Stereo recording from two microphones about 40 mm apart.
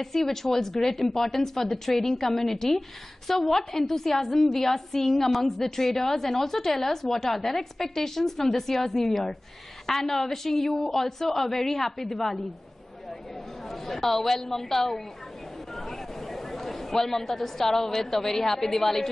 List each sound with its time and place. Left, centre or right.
0.0 s a woman's voice: centre
13.7 s a woman's voice: centre
15.7 s a sound: centre
17.9 s a woman's voice: centre